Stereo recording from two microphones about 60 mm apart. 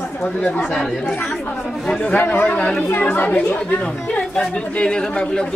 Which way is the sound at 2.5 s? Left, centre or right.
Left.